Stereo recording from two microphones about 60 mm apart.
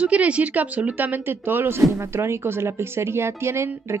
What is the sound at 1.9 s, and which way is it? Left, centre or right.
A woman's voice, right.